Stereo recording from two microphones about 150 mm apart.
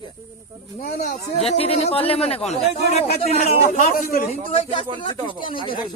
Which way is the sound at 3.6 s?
60° left (ahead or behind).